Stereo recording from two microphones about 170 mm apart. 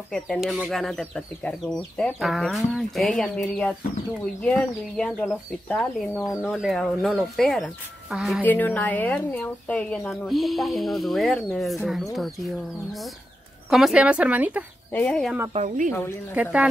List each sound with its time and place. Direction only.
0.1 s speech: centre (ahead or behind)
8.5 s speech: 10° left (ahead or behind); by 14.6 s 10° right (ahead or behind)
14.9 s speech: 10° left (ahead or behind)
15.5 s speech: 45° right (ahead or behind)